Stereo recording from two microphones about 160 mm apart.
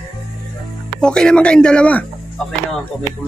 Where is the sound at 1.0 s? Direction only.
5° left (ahead or behind).